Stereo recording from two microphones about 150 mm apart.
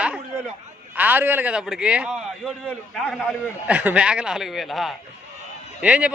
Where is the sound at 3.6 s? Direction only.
10° right (ahead or behind).